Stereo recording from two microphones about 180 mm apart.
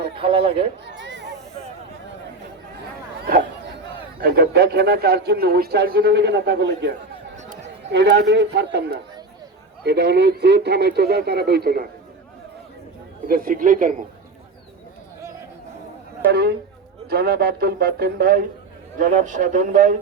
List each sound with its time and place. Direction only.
0.2 s speech: 30° right (ahead or behind)
0.9 s a sound: 80° right
4.2 s a man's voice: 60° right (ahead or behind)
7.3 s chatter: 40° right (ahead or behind)
7.9 s a man's voice: 75° right (ahead or behind)
13.2 s a man's voice: 50° right (ahead or behind)
16.3 s a man's voice: 65° right (ahead or behind); by 20.0 s 45° right (ahead or behind)